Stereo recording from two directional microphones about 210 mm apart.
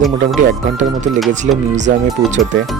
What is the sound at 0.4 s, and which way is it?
Speech, 35° right (ahead or behind).